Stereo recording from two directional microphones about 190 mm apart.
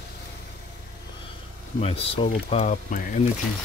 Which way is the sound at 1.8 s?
30° left (ahead or behind).